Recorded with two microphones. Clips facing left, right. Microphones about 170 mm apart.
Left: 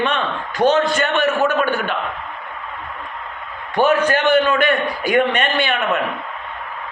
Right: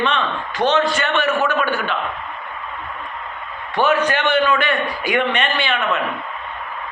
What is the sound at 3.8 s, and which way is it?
A man's voice, 45° left (ahead or behind).